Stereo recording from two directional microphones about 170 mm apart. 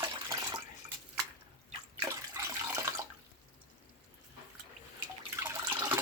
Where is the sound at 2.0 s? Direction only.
15° right (ahead or behind).